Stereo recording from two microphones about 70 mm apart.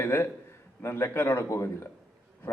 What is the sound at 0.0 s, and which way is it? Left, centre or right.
A man's voice, left.